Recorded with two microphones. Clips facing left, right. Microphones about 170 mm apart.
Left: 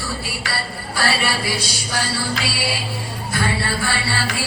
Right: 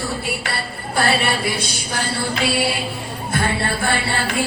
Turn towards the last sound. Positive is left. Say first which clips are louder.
# right 3 dB
turn(degrees=-55)  # may be behind; listen again after turning